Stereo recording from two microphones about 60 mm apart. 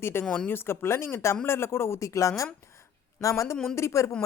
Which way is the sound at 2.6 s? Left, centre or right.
Left.